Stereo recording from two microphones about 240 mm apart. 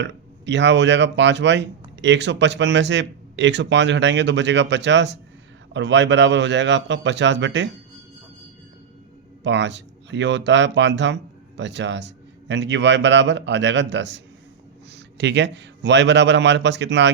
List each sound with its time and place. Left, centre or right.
0.0 s speech: right
9.4 s speech: right